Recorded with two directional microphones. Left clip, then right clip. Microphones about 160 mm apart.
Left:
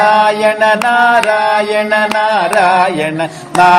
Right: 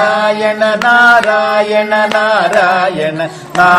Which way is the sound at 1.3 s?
25° left (ahead or behind).